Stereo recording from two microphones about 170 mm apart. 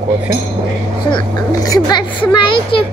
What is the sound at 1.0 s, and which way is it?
Speech, 25° left (ahead or behind).